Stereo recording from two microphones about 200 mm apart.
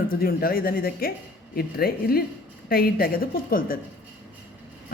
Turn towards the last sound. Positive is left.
turn(degrees=45)  # may be behind; listen again after turning